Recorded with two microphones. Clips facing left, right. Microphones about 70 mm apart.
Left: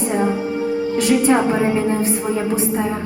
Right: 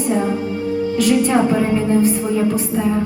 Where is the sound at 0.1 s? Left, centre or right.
Centre.